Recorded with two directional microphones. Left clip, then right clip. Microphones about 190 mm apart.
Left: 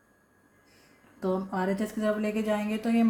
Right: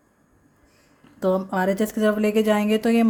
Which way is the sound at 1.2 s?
55° right (ahead or behind).